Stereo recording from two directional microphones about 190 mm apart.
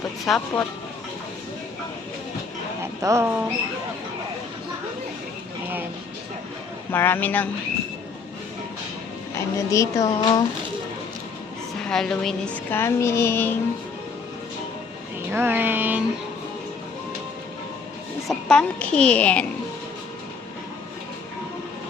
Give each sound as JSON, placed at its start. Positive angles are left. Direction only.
{"t": 0.3, "sound": "speech", "side_deg": 5}
{"t": 2.8, "sound": "speech", "side_deg": -15}
{"t": 6.9, "sound": "speech", "side_deg": 10}
{"t": 9.4, "sound": "speech", "side_deg": 15}
{"t": 11.9, "sound": "a woman's voice", "side_deg": 0}
{"t": 12.8, "sound": "speech", "side_deg": 15}
{"t": 15.3, "sound": "music", "side_deg": -10}
{"t": 18.3, "sound": "a woman's voice", "side_deg": 5}